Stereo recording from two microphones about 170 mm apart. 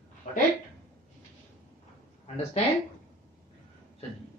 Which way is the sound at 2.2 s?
40° left (ahead or behind).